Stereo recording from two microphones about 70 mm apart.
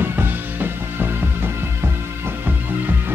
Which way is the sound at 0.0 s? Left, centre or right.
Right.